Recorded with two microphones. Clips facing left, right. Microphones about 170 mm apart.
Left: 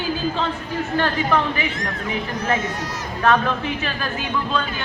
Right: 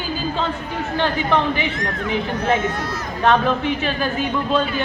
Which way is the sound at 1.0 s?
25° right (ahead or behind).